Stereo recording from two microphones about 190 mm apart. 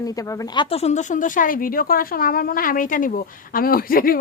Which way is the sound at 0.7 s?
35° left (ahead or behind).